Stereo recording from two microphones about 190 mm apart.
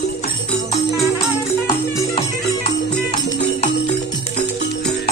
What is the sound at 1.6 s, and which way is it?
Music, 20° left (ahead or behind).